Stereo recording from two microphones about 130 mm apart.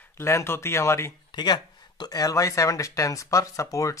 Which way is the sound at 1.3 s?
35° left (ahead or behind).